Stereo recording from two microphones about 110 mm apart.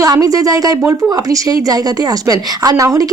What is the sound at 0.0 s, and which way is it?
Speech, 30° right (ahead or behind).